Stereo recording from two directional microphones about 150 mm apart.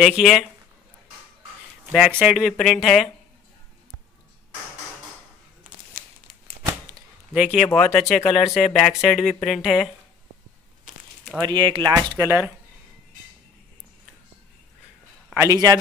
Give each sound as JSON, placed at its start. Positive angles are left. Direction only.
{"t": 0.0, "sound": "speech", "side_deg": 0}
{"t": 1.9, "sound": "speech", "side_deg": -5}
{"t": 7.3, "sound": "speech", "side_deg": -5}
{"t": 11.4, "sound": "speech", "side_deg": -30}
{"t": 12.2, "sound": "speech", "side_deg": -15}
{"t": 15.3, "sound": "speech", "side_deg": -20}